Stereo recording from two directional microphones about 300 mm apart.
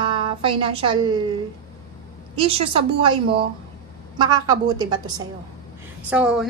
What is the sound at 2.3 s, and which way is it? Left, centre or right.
A woman's voice, centre.